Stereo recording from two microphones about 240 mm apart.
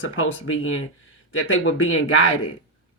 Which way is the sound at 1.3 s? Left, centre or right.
Left.